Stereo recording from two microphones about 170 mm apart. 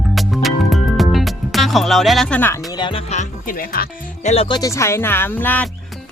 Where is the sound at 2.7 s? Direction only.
30° left (ahead or behind).